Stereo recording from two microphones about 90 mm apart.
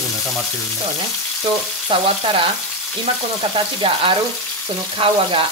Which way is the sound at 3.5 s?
80° right.